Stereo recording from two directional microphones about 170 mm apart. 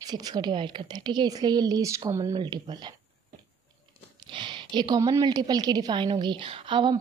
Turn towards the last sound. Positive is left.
turn(degrees=-30)  # may be behind; listen again after turning